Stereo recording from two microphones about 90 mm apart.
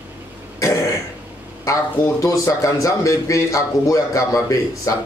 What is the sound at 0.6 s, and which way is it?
A man's voice, 35° left (ahead or behind).